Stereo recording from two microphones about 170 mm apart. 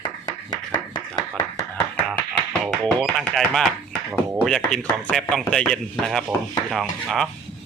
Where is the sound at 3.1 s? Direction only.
Centre (ahead or behind).